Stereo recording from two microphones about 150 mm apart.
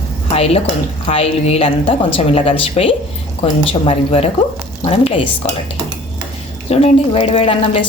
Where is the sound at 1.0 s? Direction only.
45° left (ahead or behind).